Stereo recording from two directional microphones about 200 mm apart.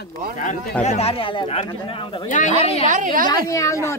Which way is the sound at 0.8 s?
30° left (ahead or behind).